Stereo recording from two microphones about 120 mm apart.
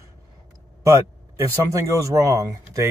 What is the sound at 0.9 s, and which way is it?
Speech, 25° right (ahead or behind).